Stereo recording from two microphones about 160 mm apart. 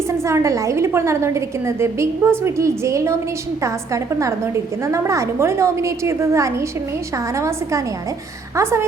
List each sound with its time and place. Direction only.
0.1 s a woman's voice: 20° right (ahead or behind)